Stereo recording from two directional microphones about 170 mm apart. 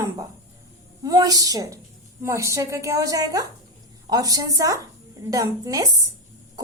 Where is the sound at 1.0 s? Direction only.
20° right (ahead or behind).